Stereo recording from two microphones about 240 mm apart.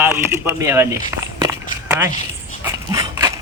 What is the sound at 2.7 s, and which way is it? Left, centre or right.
Dog, centre.